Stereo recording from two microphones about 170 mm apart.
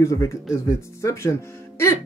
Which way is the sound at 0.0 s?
15° left (ahead or behind).